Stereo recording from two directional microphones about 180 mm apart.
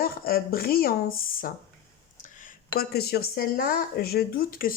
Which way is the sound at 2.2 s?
45° left (ahead or behind).